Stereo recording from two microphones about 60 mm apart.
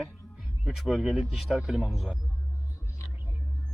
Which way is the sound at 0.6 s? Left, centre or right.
Centre.